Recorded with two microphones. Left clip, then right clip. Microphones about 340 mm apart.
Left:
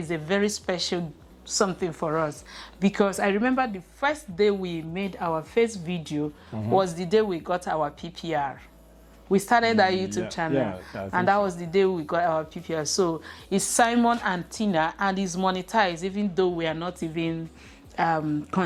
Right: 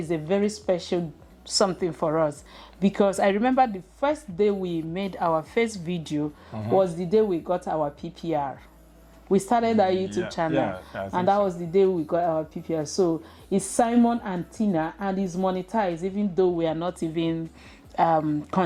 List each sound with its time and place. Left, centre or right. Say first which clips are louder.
0.1 s speech: even; left
1.5 s a woman's voice: right 2 dB; centre
4.0 s speech: even; left
4.9 s a woman's voice: right 3 dB; centre
6.5 s speech: right 1 dB; right
6.7 s speech: right 1 dB; left
10.5 s speech: right 1 dB; right
11.1 s a woman's voice: even; left